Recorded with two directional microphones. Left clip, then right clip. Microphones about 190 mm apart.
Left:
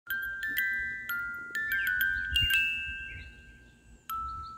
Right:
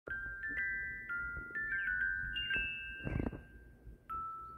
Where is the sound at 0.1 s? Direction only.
35° left (ahead or behind).